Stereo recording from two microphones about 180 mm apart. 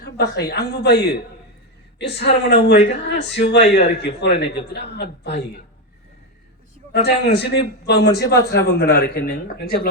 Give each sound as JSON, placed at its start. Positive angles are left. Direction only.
{"t": 0.0, "sound": "a man's voice", "side_deg": 60}
{"t": 2.0, "sound": "a man's voice", "side_deg": 70}
{"t": 6.9, "sound": "a man's voice", "side_deg": 65}